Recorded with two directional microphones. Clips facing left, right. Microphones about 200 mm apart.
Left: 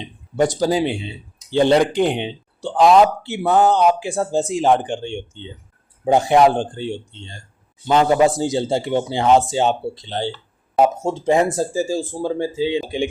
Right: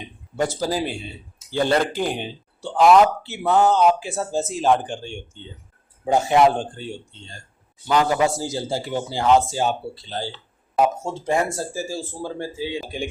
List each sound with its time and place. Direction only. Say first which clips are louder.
0.0 s speech: left 6 dB; 20° left (ahead or behind)
7.9 s speech: left 5 dB; 25° left (ahead or behind)